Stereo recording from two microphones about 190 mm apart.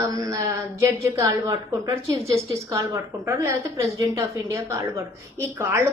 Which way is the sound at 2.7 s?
15° right (ahead or behind).